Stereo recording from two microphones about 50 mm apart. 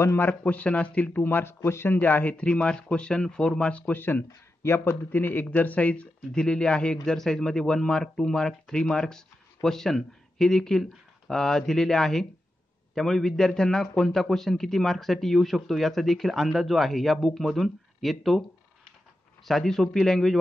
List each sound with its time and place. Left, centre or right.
0.2 s speech: left
1.2 s speech: left
2.0 s speech: left
3.8 s speech: left
4.6 s speech: left
6.3 s speech: centre
7.2 s a man's voice: centre
19.4 s speech: centre